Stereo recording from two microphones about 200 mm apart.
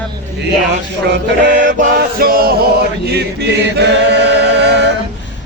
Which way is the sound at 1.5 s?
40° right (ahead or behind).